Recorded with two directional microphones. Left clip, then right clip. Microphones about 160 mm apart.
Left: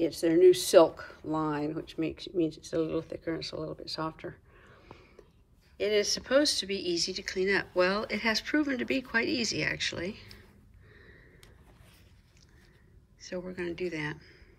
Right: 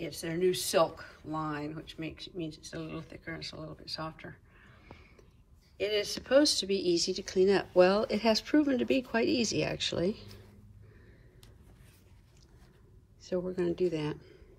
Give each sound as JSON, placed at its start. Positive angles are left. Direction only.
{"t": 0.0, "sound": "speech", "side_deg": 35}
{"t": 5.8, "sound": "speech", "side_deg": 5}
{"t": 13.7, "sound": "speech", "side_deg": -10}